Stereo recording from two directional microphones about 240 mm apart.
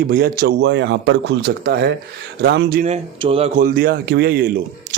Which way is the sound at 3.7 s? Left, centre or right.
Right.